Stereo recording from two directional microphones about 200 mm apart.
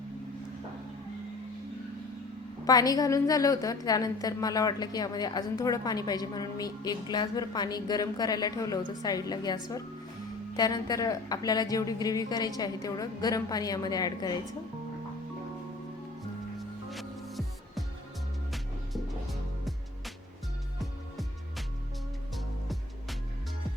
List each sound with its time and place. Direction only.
2.6 s a woman's voice: 20° left (ahead or behind)
10.6 s a woman's voice: 20° left (ahead or behind)
16.9 s music: centre (ahead or behind)